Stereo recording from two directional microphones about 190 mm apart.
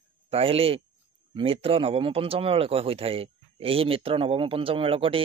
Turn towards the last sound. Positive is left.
turn(degrees=-30)  # may be behind; listen again after turning